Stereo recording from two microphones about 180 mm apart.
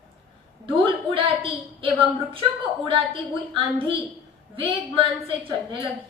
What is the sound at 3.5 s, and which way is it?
A woman's voice, 30° right (ahead or behind).